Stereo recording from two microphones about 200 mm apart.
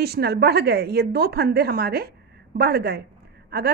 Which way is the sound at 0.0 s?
55° right (ahead or behind).